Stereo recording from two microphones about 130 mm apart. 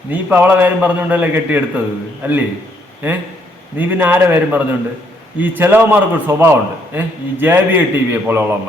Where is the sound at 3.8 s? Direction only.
15° right (ahead or behind).